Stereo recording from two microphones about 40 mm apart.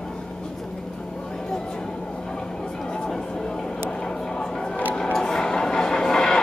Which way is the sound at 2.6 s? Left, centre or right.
Centre.